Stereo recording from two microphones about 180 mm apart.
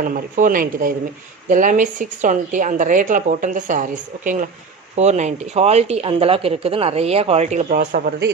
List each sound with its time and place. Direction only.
0.0 s speech: 50° right (ahead or behind)
7.9 s a man's voice: 55° right (ahead or behind)